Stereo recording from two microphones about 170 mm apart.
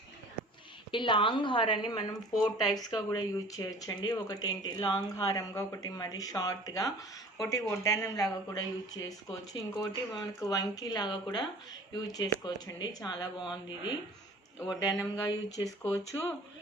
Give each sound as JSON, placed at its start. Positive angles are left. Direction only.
{"t": 0.9, "sound": "speech", "side_deg": 30}